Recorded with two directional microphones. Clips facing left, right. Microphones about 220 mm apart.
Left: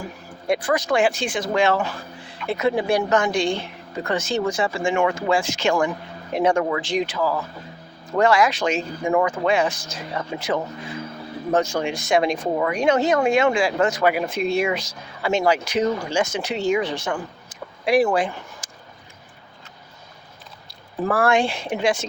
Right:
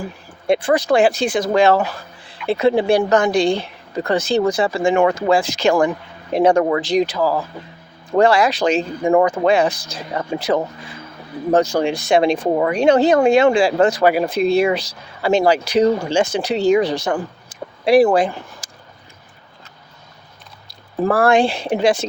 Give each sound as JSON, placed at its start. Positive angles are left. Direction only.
{"t": 0.4, "sound": "speech", "side_deg": -25}
{"t": 20.7, "sound": "speech", "side_deg": -35}